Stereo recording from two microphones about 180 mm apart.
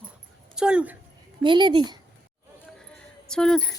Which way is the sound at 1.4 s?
25° right (ahead or behind).